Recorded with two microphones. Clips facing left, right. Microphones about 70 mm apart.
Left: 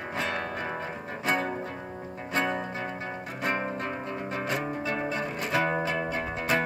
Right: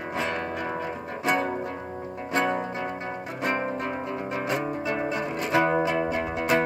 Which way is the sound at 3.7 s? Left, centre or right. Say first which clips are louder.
Right 3 dB; centre.